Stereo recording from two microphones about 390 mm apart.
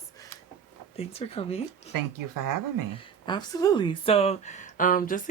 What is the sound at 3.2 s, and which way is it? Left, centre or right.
A woman's voice, centre.